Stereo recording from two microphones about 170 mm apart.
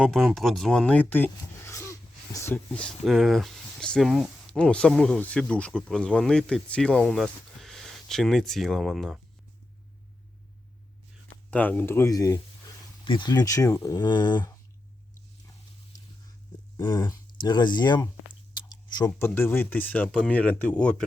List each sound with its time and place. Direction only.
0.0 s speech: centre (ahead or behind)
11.5 s speech: 10° left (ahead or behind); by 14.5 s 25° left (ahead or behind)
16.7 s a sound: 25° left (ahead or behind)
17.4 s speech: 25° left (ahead or behind)
18.5 s chewing: 25° left (ahead or behind)
19.2 s speech: 15° left (ahead or behind)